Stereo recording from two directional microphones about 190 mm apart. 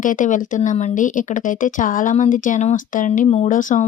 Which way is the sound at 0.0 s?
40° left (ahead or behind).